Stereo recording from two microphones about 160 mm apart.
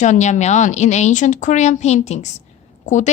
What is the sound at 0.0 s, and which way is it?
A woman's voice, 50° left (ahead or behind).